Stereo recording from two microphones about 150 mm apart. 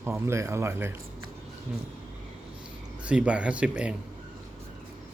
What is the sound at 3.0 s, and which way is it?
Speech, 10° right (ahead or behind).